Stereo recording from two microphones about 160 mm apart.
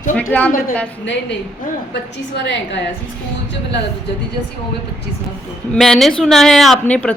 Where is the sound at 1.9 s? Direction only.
90° left.